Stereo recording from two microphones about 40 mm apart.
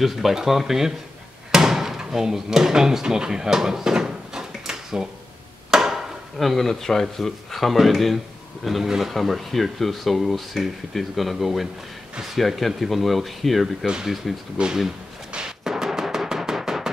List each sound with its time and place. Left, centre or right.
0.0 s speech: centre
1.5 s a sound: centre
6.3 s speech: centre
14.6 s speech: right
15.3 s music: centre